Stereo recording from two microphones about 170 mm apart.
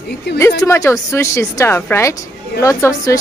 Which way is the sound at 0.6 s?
15° left (ahead or behind).